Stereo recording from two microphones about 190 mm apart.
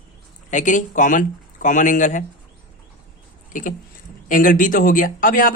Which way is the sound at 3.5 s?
45° left (ahead or behind).